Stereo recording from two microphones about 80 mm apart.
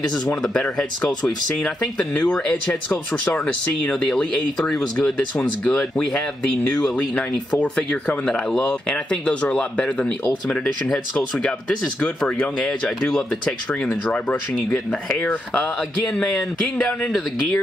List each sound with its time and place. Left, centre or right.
0.4 s speech: centre
12.5 s speech: centre
14.7 s speech: left